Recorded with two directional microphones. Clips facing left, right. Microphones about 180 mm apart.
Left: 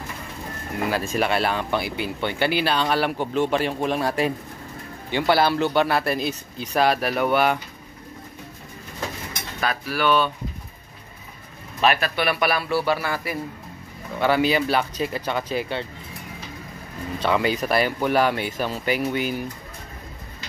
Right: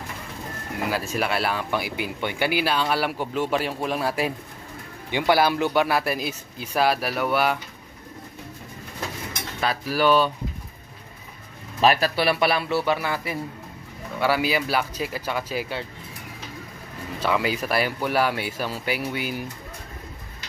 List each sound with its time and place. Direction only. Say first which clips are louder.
0.8 s speech: left 3 dB; 5° right (ahead or behind)
9.8 s speech: right 2 dB; 35° right (ahead or behind)
11.8 s a man's voice: right 1 dB; 35° right (ahead or behind)
14.2 s speech: left 3 dB; 5° right (ahead or behind)
17.2 s speech: left 2 dB; 5° right (ahead or behind)